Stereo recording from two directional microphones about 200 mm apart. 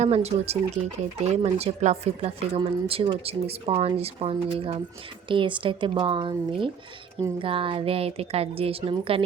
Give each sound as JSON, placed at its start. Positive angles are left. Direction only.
{"t": 0.0, "sound": "speech", "side_deg": -35}